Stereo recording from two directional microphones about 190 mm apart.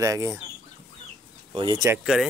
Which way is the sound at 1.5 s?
25° right (ahead or behind).